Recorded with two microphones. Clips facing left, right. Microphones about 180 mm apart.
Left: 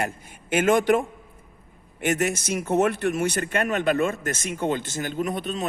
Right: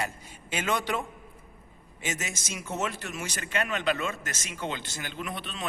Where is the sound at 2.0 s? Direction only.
60° left (ahead or behind).